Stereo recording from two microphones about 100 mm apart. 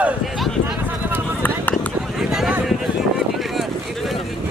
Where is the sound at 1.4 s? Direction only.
15° left (ahead or behind).